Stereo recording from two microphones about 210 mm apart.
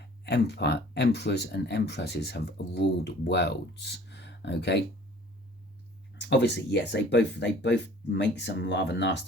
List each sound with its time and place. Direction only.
0.3 s speech: 50° left (ahead or behind)
6.1 s speech: 55° left (ahead or behind)